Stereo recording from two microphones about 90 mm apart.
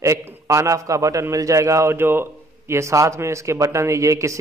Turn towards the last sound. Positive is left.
turn(degrees=-35)  # may be behind; listen again after turning